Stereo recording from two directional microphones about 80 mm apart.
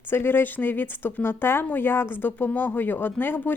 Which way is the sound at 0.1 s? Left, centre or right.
Left.